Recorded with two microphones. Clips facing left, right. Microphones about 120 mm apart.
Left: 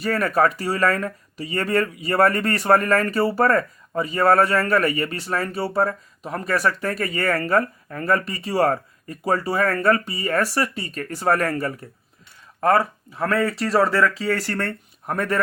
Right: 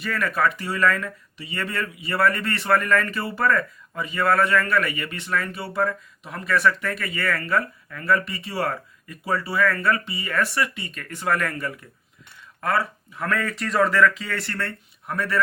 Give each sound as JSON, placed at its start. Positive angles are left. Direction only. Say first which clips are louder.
{"t": 0.0, "sound": "speech", "louder": "left 4 dB", "side_deg": 40}